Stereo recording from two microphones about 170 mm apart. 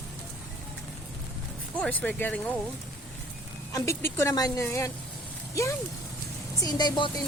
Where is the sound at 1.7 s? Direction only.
10° left (ahead or behind).